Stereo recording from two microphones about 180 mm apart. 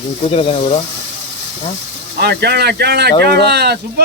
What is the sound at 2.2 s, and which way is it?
A man's voice, 65° right (ahead or behind).